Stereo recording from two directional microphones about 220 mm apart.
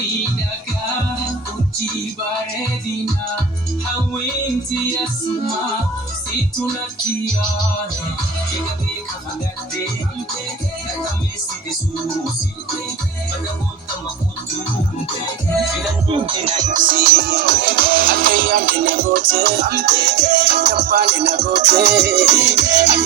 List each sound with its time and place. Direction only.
16.0 s music: 25° right (ahead or behind); by 23.0 s 50° right (ahead or behind)